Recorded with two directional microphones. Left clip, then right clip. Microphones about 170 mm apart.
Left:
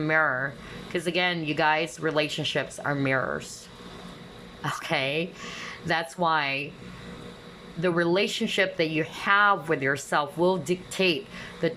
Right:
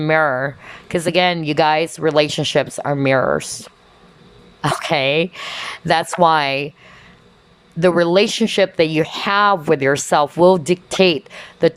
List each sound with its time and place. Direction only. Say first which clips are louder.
0.0 s speech: right 8 dB; 30° right (ahead or behind)
4.6 s speech: right 10 dB; 30° right (ahead or behind)
7.8 s speech: right 10 dB; 30° right (ahead or behind)